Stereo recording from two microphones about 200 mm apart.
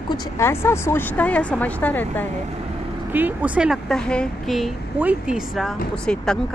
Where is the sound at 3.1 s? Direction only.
10° right (ahead or behind).